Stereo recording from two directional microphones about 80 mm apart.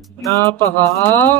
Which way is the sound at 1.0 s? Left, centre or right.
Left.